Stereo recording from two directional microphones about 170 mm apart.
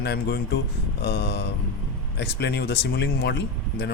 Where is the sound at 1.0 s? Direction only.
80° left.